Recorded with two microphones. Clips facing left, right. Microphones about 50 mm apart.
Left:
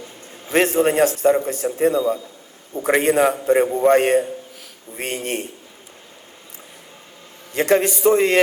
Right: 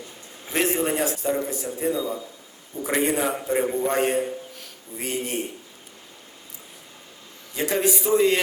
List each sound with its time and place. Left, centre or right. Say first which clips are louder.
0.5 s a man's voice: left 7 dB; left
7.5 s a man's voice: left 6 dB; left